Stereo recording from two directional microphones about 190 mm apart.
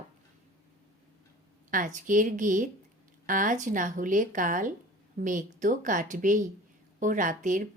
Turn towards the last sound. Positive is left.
turn(degrees=-45)  # may be behind; listen again after turning